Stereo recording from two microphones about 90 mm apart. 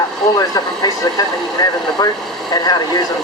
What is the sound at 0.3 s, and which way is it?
Speech, 45° left (ahead or behind).